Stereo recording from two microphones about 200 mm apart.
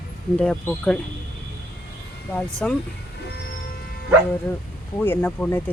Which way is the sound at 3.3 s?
55° left (ahead or behind).